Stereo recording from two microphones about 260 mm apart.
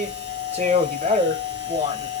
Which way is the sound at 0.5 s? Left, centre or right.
Right.